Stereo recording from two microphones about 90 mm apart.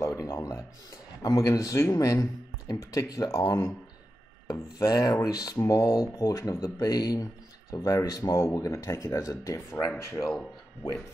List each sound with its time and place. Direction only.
0.0 s a sound: 35° left (ahead or behind)
1.2 s speech: 35° left (ahead or behind)
4.5 s rub: 40° left (ahead or behind)
5.7 s speech: 40° left (ahead or behind)